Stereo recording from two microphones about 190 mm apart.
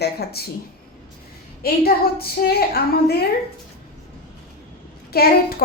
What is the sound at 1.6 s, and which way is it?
A woman's voice, 55° left (ahead or behind).